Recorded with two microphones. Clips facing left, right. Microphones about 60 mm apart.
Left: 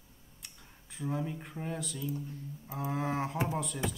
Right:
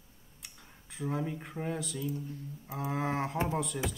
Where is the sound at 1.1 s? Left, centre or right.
Centre.